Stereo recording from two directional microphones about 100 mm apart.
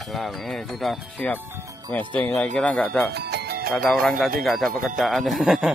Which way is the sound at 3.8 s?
Centre (ahead or behind).